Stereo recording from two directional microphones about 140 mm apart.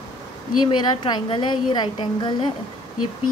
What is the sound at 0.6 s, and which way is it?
A woman's voice, 35° left (ahead or behind).